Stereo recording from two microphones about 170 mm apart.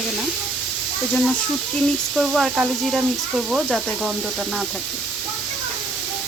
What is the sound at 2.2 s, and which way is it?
Speech, centre (ahead or behind).